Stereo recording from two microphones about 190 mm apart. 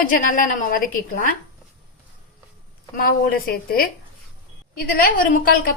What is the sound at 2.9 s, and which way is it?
A woman's voice, 50° left (ahead or behind).